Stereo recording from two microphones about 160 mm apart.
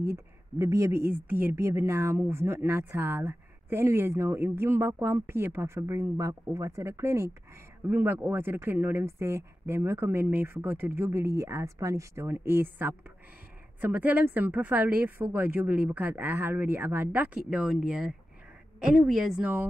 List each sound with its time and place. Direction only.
0.0 s speech: 15° right (ahead or behind)
13.7 s a woman's voice: 10° right (ahead or behind)